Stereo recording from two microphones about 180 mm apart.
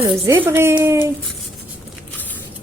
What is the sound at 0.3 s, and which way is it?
Speech, 10° right (ahead or behind).